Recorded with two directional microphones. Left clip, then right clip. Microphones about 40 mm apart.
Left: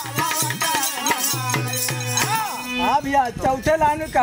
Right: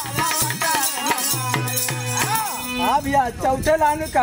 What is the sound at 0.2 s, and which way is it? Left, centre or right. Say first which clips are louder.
Music: even; centre.